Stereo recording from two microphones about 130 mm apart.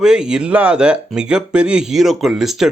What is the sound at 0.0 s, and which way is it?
Speech, 5° right (ahead or behind).